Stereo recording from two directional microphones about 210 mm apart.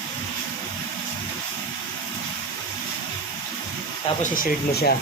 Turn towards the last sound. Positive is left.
turn(degrees=45)  # may be behind; listen again after turning